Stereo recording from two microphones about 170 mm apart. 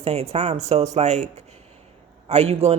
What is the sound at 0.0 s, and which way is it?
Speech, 40° right (ahead or behind).